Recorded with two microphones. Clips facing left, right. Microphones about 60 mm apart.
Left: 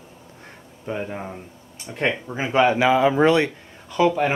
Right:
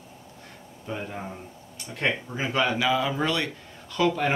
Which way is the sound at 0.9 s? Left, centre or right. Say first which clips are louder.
Left 5 dB; centre.